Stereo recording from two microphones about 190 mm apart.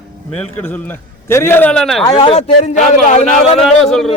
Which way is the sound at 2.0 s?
25° left (ahead or behind).